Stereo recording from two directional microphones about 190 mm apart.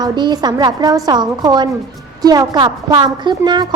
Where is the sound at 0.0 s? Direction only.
20° right (ahead or behind).